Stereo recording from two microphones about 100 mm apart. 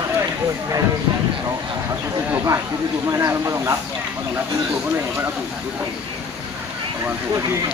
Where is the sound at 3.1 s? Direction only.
30° right (ahead or behind).